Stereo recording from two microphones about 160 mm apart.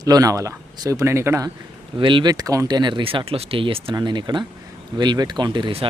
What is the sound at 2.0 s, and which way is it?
Speech, 30° right (ahead or behind).